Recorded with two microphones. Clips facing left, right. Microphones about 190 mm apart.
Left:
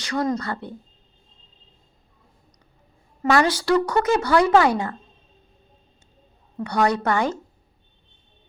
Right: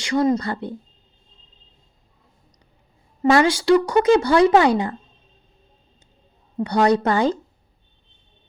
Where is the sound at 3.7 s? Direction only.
15° right (ahead or behind).